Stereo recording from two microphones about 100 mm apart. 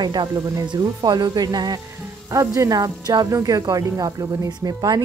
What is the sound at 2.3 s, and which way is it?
A woman's voice, 35° right (ahead or behind).